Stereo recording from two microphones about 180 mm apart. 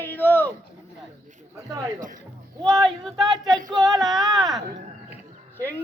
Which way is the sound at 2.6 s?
20° right (ahead or behind).